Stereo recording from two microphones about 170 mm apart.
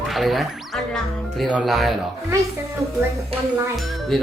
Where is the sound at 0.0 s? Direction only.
Centre (ahead or behind).